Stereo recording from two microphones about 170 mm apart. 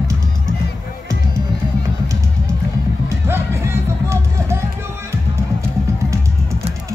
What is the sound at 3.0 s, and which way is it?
Music, 15° right (ahead or behind).